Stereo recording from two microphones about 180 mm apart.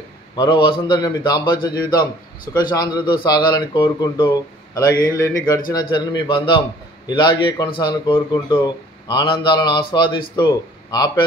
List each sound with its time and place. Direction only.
0.4 s a man's voice: 25° left (ahead or behind)